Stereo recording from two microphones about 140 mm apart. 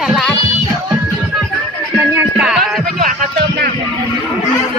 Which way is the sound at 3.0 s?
80° right.